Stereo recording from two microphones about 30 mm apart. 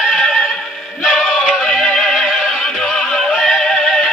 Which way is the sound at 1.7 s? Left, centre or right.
Centre.